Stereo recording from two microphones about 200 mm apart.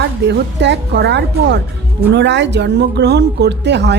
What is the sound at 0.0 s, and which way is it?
Speech, 60° right (ahead or behind).